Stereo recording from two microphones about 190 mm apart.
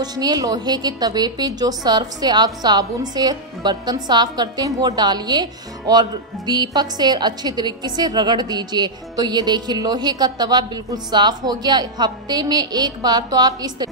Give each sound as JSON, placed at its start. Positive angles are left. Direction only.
{"t": 0.0, "sound": "a woman's voice", "side_deg": -20}